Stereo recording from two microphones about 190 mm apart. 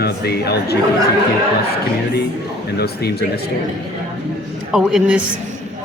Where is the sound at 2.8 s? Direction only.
60° left (ahead or behind).